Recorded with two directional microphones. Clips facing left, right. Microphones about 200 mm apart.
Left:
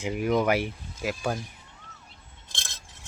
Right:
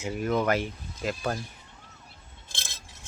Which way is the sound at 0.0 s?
15° left (ahead or behind).